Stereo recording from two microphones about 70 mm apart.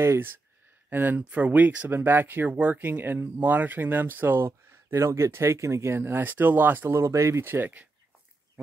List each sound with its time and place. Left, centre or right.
0.0 s speech: right
1.9 s speech: right
7.0 s speech: right